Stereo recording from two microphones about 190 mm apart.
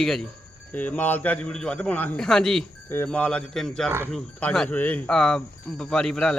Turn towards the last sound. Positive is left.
turn(degrees=5)  # may be behind; listen again after turning